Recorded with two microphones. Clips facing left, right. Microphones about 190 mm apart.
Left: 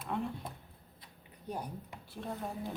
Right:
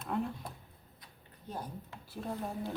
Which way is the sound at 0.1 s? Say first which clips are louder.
Right 2 dB; centre (ahead or behind).